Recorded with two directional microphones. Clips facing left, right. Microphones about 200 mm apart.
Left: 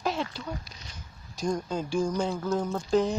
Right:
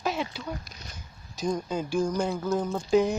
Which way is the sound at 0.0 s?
5° right (ahead or behind).